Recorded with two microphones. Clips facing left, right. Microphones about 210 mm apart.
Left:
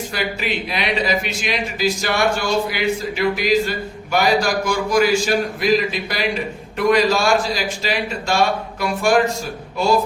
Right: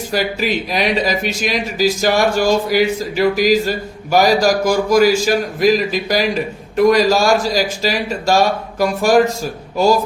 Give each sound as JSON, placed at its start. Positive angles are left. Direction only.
{"t": 0.1, "sound": "a man's voice", "side_deg": -40}